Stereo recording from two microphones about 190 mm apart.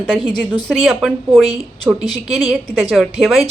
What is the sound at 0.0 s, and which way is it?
Speech, 5° left (ahead or behind).